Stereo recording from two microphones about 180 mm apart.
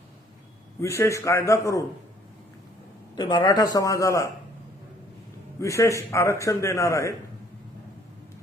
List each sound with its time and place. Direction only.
0.8 s a man's voice: 15° left (ahead or behind)
3.2 s a man's voice: 25° left (ahead or behind)
5.5 s a man's voice: 15° left (ahead or behind)